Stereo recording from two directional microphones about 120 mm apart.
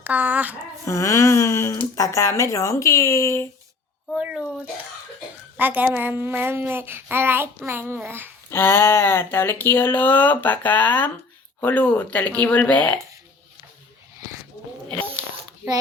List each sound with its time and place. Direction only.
0.0 s a child's voice: 15° right (ahead or behind)
0.9 s speech: 25° left (ahead or behind)
4.2 s a child's voice: 10° right (ahead or behind)
5.5 s a child's voice: 15° right (ahead or behind)
8.4 s speech: 20° left (ahead or behind)